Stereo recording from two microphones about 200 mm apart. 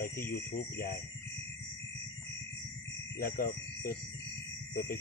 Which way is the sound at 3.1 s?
50° left (ahead or behind).